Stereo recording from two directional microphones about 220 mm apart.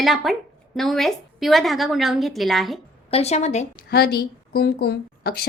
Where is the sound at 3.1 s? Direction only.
30° left (ahead or behind).